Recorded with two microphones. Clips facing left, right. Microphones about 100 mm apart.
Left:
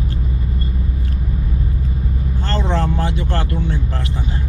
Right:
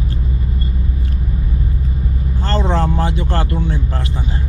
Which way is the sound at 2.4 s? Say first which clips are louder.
Right 3 dB; 35° right (ahead or behind).